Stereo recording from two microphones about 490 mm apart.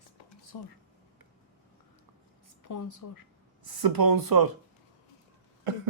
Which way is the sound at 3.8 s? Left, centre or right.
Right.